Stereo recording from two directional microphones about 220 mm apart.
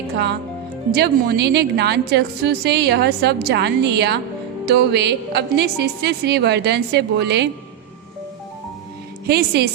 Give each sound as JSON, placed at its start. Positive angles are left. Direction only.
{"t": 0.9, "sound": "a woman's voice", "side_deg": -45}
{"t": 9.2, "sound": "a woman's voice", "side_deg": -45}